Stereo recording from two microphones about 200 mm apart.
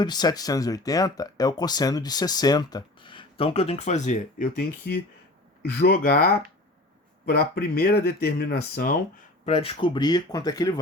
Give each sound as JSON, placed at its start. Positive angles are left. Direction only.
{"t": 0.0, "sound": "speech", "side_deg": 20}
{"t": 9.5, "sound": "speech", "side_deg": 30}